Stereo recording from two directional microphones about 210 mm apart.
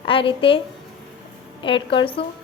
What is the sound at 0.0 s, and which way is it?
Speech, 25° left (ahead or behind).